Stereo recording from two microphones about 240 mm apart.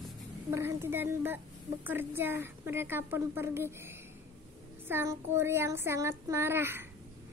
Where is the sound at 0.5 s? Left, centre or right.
Centre.